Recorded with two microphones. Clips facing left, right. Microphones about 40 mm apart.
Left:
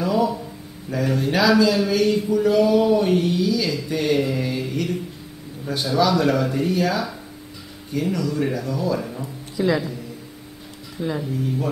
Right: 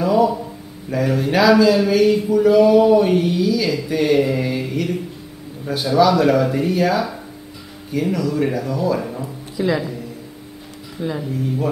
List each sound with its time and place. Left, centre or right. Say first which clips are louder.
0.0 s a sound: right 5 dB; centre
0.8 s speech: right 3 dB; centre
11.0 s speech: right 1 dB; centre